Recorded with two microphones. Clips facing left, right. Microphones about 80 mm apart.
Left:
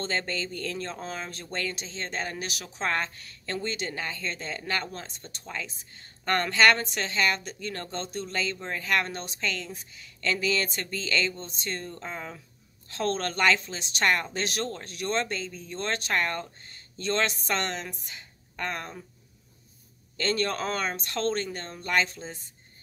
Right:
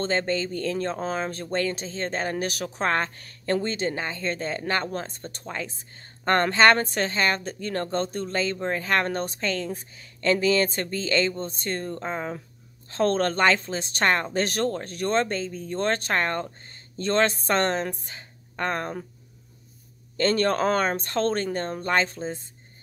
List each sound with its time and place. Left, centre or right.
0.0 s speech: right
20.2 s speech: right